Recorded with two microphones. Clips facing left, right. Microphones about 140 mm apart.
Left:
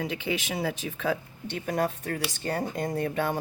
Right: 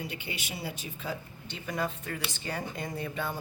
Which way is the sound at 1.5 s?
50° left (ahead or behind).